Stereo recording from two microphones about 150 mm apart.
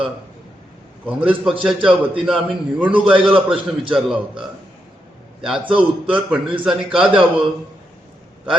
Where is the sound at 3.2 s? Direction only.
35° right (ahead or behind).